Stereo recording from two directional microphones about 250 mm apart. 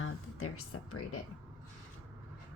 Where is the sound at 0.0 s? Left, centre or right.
Left.